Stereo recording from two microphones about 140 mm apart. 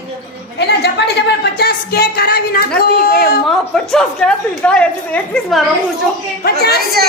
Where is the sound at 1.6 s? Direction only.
90° left.